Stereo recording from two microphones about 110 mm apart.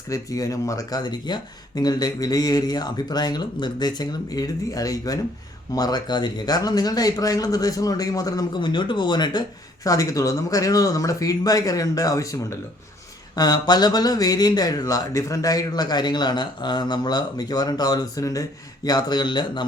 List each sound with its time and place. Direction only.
0.1 s speech: 30° left (ahead or behind)